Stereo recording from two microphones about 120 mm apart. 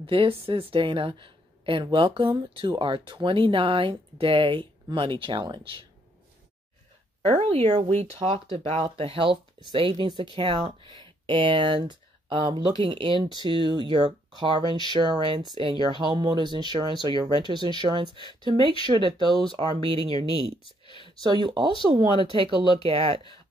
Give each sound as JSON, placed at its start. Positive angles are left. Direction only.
{"t": 0.0, "sound": "a woman's voice", "side_deg": -45}
{"t": 7.4, "sound": "a woman's voice", "side_deg": -60}
{"t": 20.6, "sound": "a sound", "side_deg": 45}
{"t": 21.2, "sound": "a woman's voice", "side_deg": -40}